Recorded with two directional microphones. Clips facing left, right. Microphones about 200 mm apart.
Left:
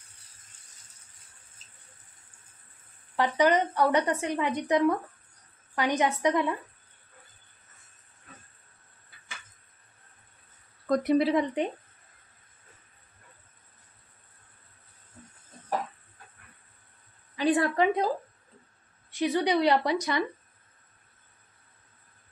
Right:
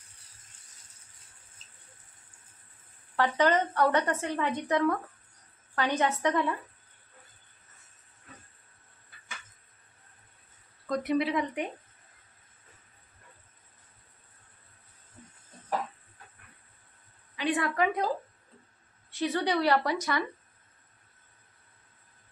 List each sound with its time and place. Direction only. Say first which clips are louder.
3.2 s a woman's voice: left 2 dB; 15° left (ahead or behind)
10.9 s speech: left 5 dB; 40° left (ahead or behind)
17.4 s a sound: left 4 dB; 35° left (ahead or behind)
19.0 s a woman's voice: left 3 dB; 15° left (ahead or behind)